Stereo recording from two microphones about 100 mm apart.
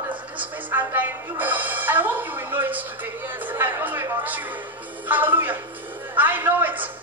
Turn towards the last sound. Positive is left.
turn(degrees=-20)  # may be behind; listen again after turning